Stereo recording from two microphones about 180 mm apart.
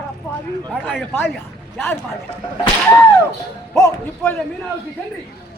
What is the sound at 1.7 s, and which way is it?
Speech, 10° left (ahead or behind).